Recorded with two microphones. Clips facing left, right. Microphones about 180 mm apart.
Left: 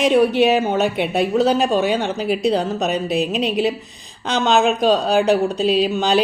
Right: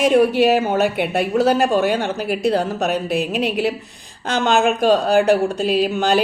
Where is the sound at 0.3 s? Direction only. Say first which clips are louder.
Even; 10° right (ahead or behind).